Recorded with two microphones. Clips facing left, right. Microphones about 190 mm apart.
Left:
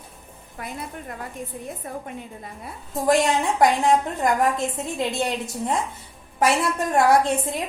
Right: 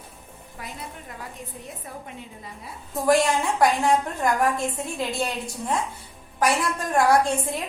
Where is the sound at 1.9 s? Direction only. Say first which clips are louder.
Left 6 dB; 50° left (ahead or behind).